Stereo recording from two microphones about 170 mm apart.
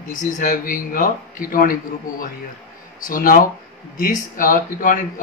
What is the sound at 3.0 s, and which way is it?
A man's voice, 55° left (ahead or behind).